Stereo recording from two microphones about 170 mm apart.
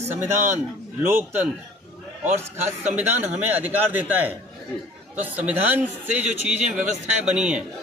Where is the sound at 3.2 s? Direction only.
40° right (ahead or behind).